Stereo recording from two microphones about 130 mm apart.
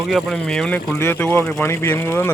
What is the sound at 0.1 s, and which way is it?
Speech, 5° left (ahead or behind).